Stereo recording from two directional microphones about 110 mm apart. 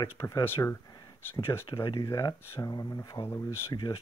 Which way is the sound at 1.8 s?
45° left (ahead or behind).